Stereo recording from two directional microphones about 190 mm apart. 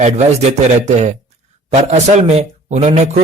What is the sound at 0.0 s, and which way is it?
A man's voice, 35° right (ahead or behind).